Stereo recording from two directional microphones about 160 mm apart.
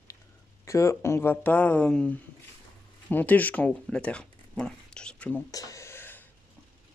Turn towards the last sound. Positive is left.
turn(degrees=15)  # may be behind; listen again after turning